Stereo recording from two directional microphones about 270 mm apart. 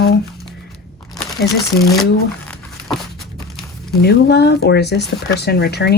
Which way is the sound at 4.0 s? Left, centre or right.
Left.